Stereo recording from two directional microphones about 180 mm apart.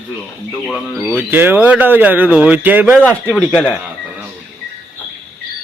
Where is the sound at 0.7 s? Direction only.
Centre (ahead or behind).